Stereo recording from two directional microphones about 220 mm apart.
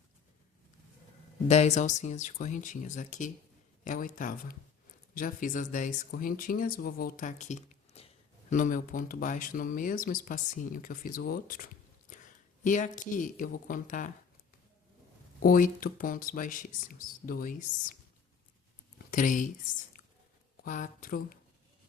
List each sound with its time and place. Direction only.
1.5 s speech: 30° left (ahead or behind)
15.4 s speech: 40° left (ahead or behind)
19.1 s speech: 35° left (ahead or behind)
20.7 s speech: 35° left (ahead or behind)